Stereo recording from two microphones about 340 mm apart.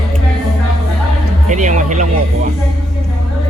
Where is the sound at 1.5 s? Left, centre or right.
Right.